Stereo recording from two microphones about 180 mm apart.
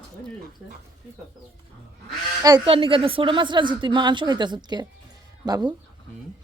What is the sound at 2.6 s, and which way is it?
A woman's voice, 30° right (ahead or behind).